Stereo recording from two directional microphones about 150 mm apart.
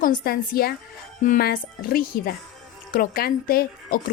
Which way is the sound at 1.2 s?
75° left (ahead or behind).